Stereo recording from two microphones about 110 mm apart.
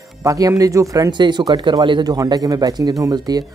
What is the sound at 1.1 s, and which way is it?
Speech, 40° right (ahead or behind).